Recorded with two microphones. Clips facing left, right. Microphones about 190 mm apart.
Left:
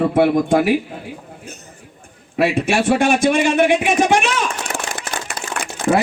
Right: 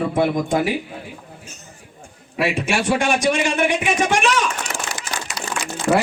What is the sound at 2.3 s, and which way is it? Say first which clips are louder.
A man's voice: left 4 dB; 55° left (ahead or behind).